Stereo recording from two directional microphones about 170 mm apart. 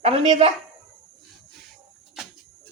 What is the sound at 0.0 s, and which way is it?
Speech, 40° right (ahead or behind).